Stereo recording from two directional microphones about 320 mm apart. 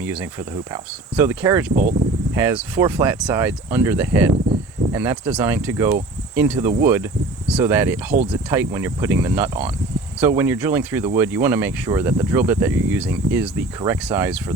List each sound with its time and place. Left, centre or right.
0.0 s speech: centre
1.7 s speech: right
2.3 s speech: centre
4.4 s a sound: centre
4.9 s speech: centre
8.1 s speech: right
8.4 s speech: centre